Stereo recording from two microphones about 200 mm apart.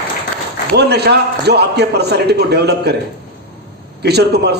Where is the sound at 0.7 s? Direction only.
55° right (ahead or behind).